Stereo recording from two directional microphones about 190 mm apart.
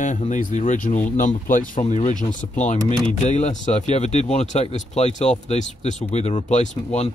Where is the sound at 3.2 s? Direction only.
40° left (ahead or behind).